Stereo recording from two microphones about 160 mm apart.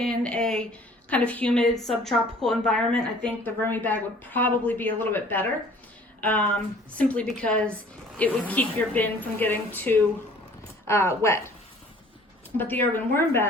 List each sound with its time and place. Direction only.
0.0 s a woman's voice: 5° left (ahead or behind)
12.5 s a woman's voice: 10° left (ahead or behind)